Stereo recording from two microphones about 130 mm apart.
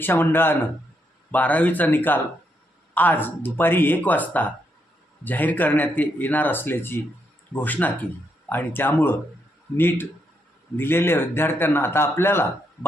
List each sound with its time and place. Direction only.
0.0 s speech: 15° left (ahead or behind)